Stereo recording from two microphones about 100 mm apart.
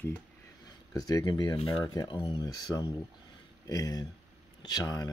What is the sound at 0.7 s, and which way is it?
Speech, 40° left (ahead or behind).